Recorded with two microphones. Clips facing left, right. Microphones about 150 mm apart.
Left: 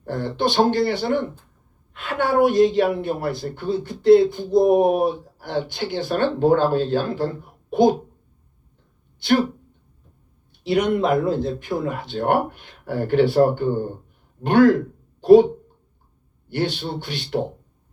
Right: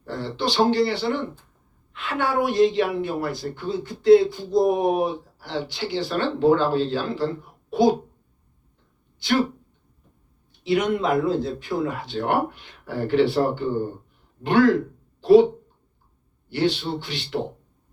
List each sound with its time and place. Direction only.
0.0 s a woman's voice: 55° left (ahead or behind)
10.7 s a woman's voice: 50° left (ahead or behind)
16.5 s a woman's voice: 50° left (ahead or behind)